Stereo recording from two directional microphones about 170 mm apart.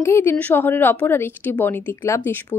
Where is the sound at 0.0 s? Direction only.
15° left (ahead or behind).